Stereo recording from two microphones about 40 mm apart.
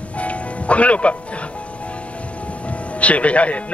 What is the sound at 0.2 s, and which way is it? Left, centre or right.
Music, left.